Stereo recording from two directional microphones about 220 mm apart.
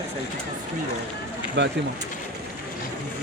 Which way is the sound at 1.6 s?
55° right (ahead or behind).